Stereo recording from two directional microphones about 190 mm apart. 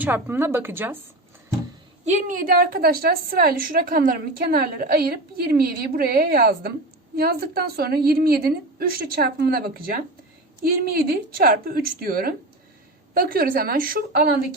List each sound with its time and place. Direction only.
0.0 s a woman's voice: 10° right (ahead or behind)
2.0 s a woman's voice: 40° right (ahead or behind)